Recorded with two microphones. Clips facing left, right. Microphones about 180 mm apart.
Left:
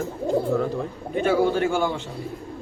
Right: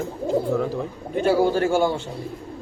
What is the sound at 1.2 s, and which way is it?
Speech, 40° right (ahead or behind).